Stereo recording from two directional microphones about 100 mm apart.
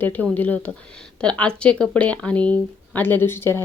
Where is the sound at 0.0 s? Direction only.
15° left (ahead or behind).